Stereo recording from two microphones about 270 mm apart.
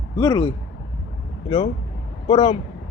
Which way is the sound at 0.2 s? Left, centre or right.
Centre.